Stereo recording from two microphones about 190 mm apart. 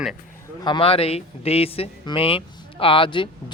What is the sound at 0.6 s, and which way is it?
Speech, 25° left (ahead or behind).